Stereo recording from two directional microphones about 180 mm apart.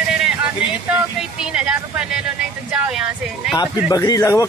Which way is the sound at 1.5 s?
5° right (ahead or behind).